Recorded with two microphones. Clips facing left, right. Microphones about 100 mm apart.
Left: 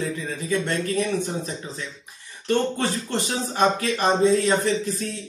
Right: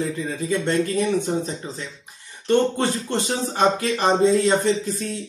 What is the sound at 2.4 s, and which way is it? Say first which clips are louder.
Speech: right 3 dB; 20° right (ahead or behind).